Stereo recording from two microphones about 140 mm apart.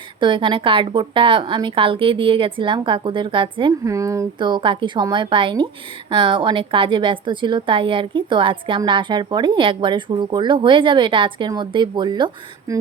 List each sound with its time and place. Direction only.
0.2 s speech: 35° right (ahead or behind)
3.8 s speech: 20° right (ahead or behind)
4.4 s speech: 35° right (ahead or behind)